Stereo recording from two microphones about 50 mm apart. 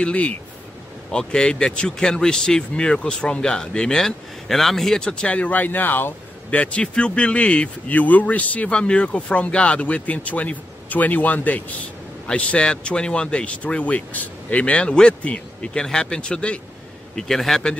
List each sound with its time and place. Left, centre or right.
0.0 s speech: left
1.1 s speech: centre; by 6.1 s left
6.5 s speech: left
12.3 s speech: left
17.1 s speech: centre